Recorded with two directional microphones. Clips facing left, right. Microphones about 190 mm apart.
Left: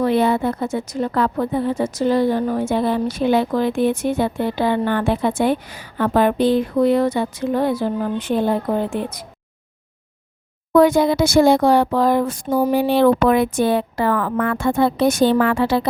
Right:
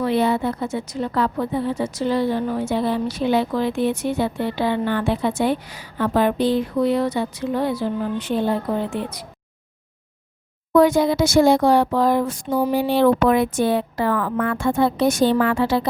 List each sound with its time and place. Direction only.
0.0 s a woman's voice: 50° left (ahead or behind)
10.7 s speech: 55° left (ahead or behind)
12.7 s speech: 65° left (ahead or behind)